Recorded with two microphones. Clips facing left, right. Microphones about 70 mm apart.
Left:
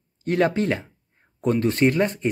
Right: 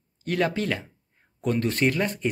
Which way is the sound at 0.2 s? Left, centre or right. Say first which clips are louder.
Left 4 dB; left.